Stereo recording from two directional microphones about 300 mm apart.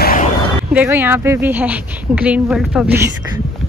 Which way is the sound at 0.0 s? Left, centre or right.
Left.